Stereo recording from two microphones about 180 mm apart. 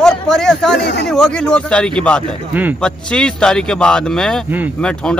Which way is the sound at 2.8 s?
5° left (ahead or behind).